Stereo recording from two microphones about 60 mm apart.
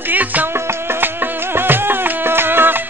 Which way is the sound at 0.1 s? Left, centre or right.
Right.